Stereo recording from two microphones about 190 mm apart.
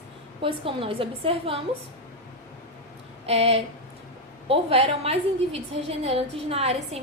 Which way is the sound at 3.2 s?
30° right (ahead or behind).